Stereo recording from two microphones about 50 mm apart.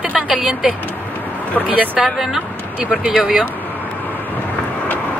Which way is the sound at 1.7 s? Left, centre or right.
Right.